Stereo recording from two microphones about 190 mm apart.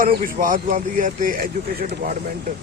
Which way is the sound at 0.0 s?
45° right (ahead or behind).